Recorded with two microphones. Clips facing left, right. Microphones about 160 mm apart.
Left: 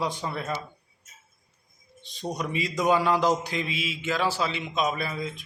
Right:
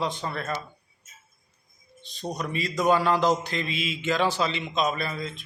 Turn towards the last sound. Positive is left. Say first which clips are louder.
# even
turn(degrees=10)  # may be behind; listen again after turning